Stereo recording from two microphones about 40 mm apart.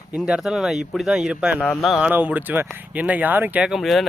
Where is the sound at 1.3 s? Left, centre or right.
Right.